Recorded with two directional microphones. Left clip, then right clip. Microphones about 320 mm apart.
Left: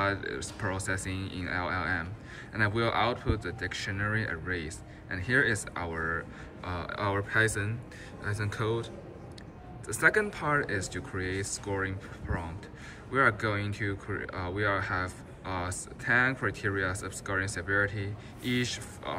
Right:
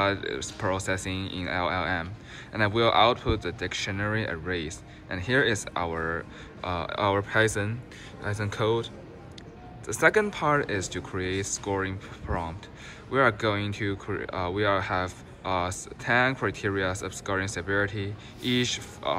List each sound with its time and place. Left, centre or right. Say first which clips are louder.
0.0 s speech: right 4 dB; centre